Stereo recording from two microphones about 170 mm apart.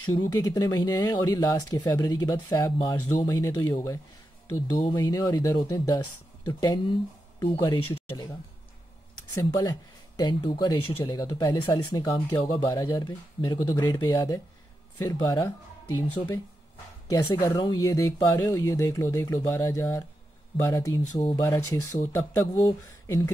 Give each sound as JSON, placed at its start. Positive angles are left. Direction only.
{"t": 0.1, "sound": "speech", "side_deg": 20}
{"t": 9.3, "sound": "speech", "side_deg": 20}
{"t": 21.0, "sound": "speech", "side_deg": 40}
{"t": 22.3, "sound": "speech", "side_deg": 20}